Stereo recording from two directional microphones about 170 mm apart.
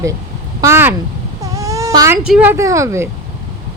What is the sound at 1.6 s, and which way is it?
Baby cry, 20° right (ahead or behind).